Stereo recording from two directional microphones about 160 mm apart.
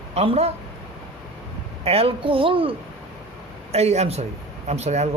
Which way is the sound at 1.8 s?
40° right (ahead or behind).